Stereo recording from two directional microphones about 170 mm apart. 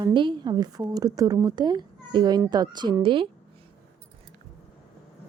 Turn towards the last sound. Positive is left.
turn(degrees=-30)  # may be behind; listen again after turning